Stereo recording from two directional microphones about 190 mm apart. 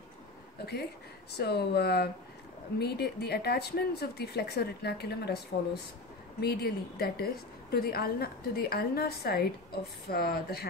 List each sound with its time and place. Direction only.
0.6 s a sound: 60° left (ahead or behind)
1.3 s a woman's voice: 60° left (ahead or behind)
6.4 s a woman's voice: 55° left (ahead or behind)